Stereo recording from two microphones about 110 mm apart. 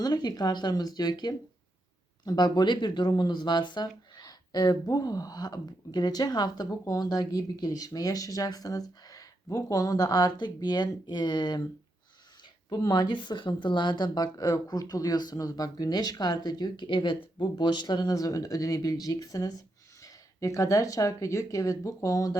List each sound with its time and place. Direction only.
0.0 s speech: 40° left (ahead or behind)
12.7 s speech: 35° left (ahead or behind)